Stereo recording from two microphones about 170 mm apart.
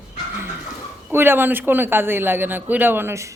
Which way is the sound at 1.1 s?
15° right (ahead or behind).